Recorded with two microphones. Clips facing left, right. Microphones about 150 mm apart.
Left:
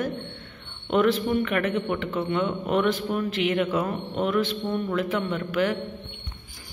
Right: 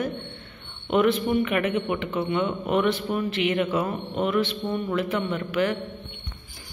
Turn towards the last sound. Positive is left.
turn(degrees=0)  # may be behind; listen again after turning